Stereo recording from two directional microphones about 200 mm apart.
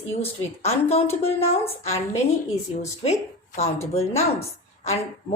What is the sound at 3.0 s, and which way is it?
A woman's voice, 30° left (ahead or behind).